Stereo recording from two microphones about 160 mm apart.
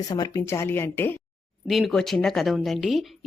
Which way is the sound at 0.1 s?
20° left (ahead or behind).